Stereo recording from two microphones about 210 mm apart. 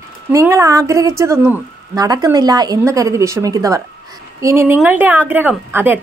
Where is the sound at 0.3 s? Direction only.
15° right (ahead or behind).